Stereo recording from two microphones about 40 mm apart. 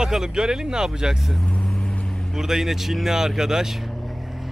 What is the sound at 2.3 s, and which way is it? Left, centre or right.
Speech, centre.